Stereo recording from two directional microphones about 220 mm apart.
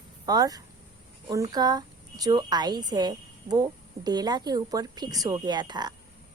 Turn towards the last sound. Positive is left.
turn(degrees=-20)  # may be behind; listen again after turning